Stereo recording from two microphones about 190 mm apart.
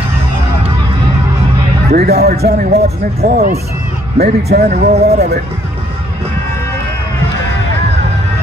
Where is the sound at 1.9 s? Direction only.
55° right (ahead or behind).